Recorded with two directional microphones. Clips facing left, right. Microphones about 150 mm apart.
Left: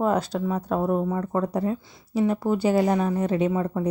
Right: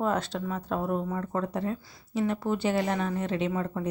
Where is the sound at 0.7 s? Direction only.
30° left (ahead or behind).